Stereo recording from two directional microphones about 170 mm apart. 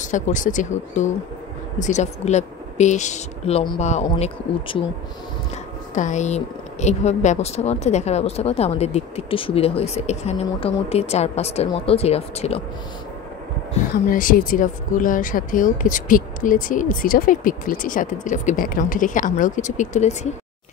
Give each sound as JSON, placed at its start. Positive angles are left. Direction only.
{"t": 0.0, "sound": "speech", "side_deg": 50}
{"t": 5.9, "sound": "speech", "side_deg": 45}
{"t": 14.1, "sound": "speech", "side_deg": 55}